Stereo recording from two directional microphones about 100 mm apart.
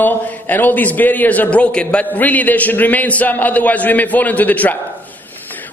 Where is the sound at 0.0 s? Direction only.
20° left (ahead or behind).